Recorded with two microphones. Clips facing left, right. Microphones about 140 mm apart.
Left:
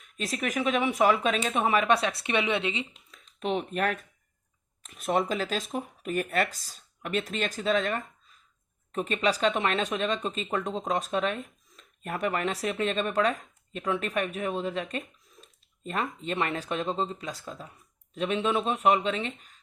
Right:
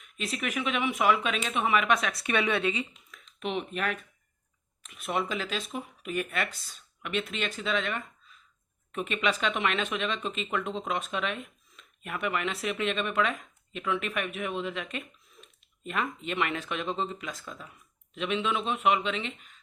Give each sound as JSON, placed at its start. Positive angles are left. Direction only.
{"t": 0.0, "sound": "speech", "side_deg": 40}
{"t": 3.1, "sound": "a sound", "side_deg": 35}
{"t": 4.8, "sound": "speech", "side_deg": 40}